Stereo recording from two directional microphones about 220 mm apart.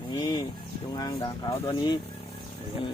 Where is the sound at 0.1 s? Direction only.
15° left (ahead or behind).